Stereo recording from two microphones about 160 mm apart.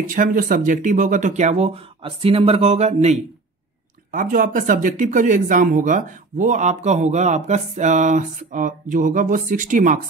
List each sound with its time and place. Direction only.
0.0 s speech: 60° right (ahead or behind); by 3.2 s 45° right (ahead or behind)
4.1 s speech: 60° right (ahead or behind)